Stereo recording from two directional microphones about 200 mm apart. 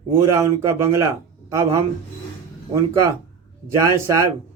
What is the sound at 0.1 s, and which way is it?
Speech, 15° right (ahead or behind).